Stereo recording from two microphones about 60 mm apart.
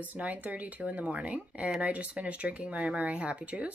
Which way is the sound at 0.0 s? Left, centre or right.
Right.